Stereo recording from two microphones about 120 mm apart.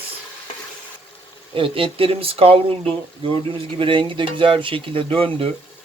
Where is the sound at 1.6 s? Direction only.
50° right (ahead or behind).